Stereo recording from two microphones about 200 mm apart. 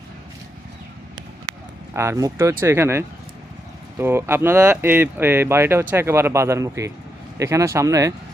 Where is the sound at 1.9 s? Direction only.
15° right (ahead or behind).